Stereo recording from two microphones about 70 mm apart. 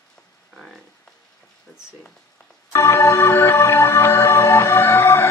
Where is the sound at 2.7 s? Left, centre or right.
Left.